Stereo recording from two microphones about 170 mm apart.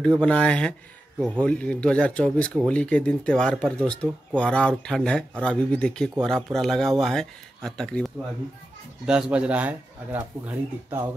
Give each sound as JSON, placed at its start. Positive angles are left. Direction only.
{"t": 0.0, "sound": "speech", "side_deg": 5}